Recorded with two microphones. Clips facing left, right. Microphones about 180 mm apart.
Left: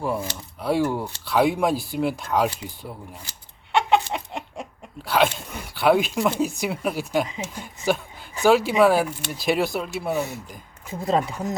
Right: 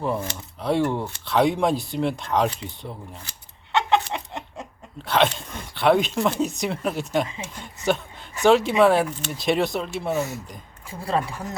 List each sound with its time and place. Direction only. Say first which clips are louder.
0.0 s speech: even; 5° left (ahead or behind)
3.7 s chicken: left 1 dB; 10° left (ahead or behind)
5.0 s speech: even; 5° left (ahead or behind)
7.3 s speech: left 3 dB; 15° left (ahead or behind)
7.9 s speech: even; 5° left (ahead or behind)
10.8 s speech: left 3 dB; 20° left (ahead or behind)